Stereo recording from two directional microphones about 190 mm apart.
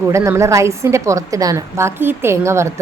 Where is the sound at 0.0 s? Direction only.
15° right (ahead or behind).